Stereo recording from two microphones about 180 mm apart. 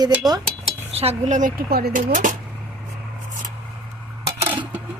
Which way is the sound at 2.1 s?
45° right (ahead or behind).